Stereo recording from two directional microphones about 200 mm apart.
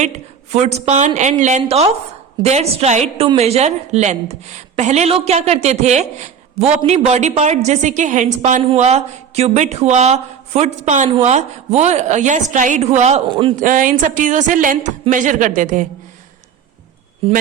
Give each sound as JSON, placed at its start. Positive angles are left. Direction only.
{"t": 0.0, "sound": "a woman's voice", "side_deg": -35}
{"t": 13.6, "sound": "a woman's voice", "side_deg": -40}